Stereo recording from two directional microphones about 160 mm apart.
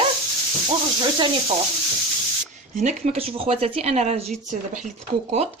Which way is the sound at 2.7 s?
50° right (ahead or behind).